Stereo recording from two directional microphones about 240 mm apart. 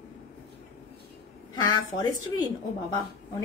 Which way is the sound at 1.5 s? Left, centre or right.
Centre.